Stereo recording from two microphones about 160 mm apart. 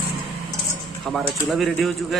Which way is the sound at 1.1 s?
Centre (ahead or behind).